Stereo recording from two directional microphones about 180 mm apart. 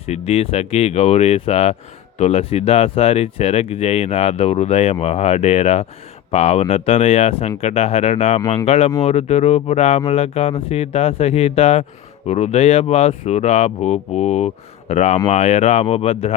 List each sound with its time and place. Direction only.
0.1 s speech: 35° left (ahead or behind)